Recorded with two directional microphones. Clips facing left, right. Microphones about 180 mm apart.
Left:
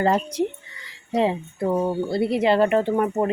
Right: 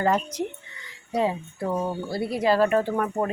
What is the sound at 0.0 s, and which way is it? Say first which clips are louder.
Speech: left 3 dB; 30° left (ahead or behind).